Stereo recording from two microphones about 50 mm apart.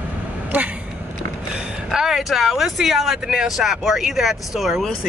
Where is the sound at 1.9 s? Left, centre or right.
Centre.